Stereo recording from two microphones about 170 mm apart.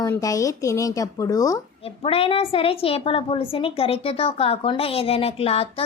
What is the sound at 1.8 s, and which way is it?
A woman's voice, 35° left (ahead or behind).